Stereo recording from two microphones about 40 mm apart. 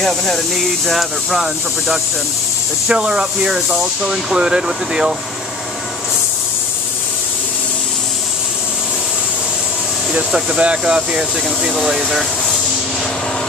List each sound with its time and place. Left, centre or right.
0.0 s speech: centre
2.9 s speech: right
10.1 s speech: right
11.0 s speech: centre